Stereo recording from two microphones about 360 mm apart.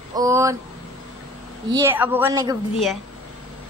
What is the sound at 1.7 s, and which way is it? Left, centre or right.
Speech, centre.